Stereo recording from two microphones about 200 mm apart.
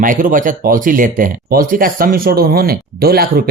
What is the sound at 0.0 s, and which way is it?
Speech, 40° right (ahead or behind).